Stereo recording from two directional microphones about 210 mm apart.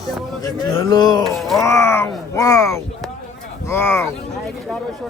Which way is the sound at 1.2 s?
Centre (ahead or behind).